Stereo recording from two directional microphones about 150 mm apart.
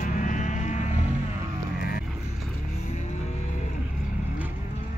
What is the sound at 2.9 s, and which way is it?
Vehicle, 50° left (ahead or behind).